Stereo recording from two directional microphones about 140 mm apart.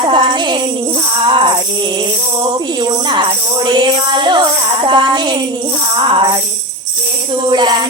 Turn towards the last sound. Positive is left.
turn(degrees=-35)  # may be behind; listen again after turning